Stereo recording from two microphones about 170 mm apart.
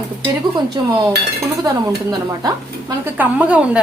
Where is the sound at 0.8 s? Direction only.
25° right (ahead or behind).